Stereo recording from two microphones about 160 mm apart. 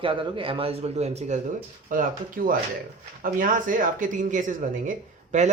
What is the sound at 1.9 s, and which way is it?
Speech, 60° right (ahead or behind).